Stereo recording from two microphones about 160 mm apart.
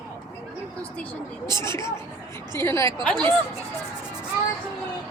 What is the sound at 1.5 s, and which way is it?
Speech, 15° left (ahead or behind).